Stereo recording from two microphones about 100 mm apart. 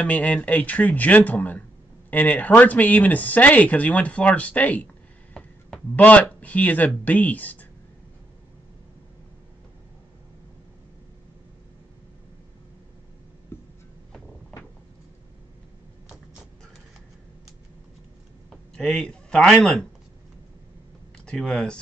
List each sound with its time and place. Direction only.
0.0 s speech: 15° left (ahead or behind)
5.3 s a sound: 15° left (ahead or behind)
6.4 s speech: 15° left (ahead or behind)
18.8 s a man's voice: 5° left (ahead or behind)
21.3 s speech: 5° left (ahead or behind)